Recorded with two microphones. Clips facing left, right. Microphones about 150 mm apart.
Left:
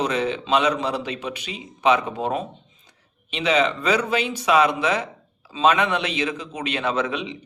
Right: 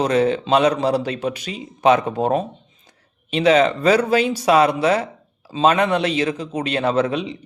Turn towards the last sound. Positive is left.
turn(degrees=-40)  # may be behind; listen again after turning